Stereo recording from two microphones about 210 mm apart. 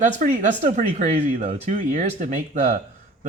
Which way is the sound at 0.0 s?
35° right (ahead or behind).